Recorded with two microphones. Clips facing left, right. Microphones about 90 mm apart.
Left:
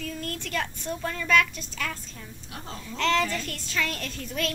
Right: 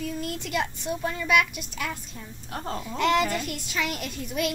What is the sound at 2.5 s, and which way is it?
Speech, 40° right (ahead or behind).